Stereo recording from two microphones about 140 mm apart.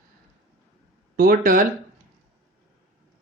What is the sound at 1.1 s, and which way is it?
Speech, 90° right.